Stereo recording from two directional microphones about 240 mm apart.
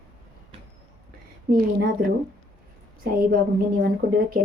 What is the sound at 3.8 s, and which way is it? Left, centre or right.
Speech, right.